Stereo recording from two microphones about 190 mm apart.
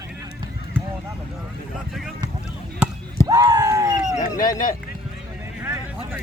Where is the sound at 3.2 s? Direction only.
20° right (ahead or behind).